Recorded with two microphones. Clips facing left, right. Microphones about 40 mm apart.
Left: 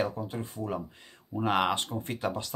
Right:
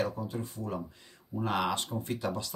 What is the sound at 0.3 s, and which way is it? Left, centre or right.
Speech, left.